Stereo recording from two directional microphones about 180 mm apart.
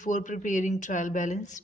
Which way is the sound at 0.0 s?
45° left (ahead or behind).